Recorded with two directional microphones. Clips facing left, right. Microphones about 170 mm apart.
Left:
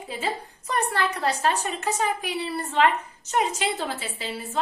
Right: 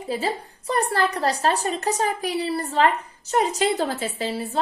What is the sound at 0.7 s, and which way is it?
A woman's voice, 35° right (ahead or behind).